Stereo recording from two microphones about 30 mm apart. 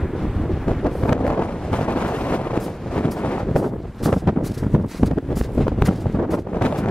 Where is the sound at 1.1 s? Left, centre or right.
Left.